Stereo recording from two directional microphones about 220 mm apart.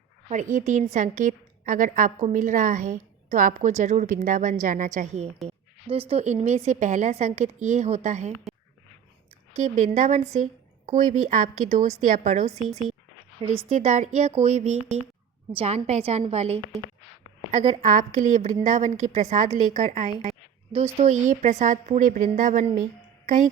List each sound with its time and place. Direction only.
0.3 s a woman's voice: 35° right (ahead or behind)
9.6 s a woman's voice: 35° right (ahead or behind)